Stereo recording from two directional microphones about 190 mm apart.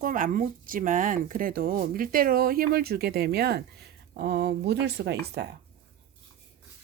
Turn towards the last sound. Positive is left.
turn(degrees=-60)  # may be behind; listen again after turning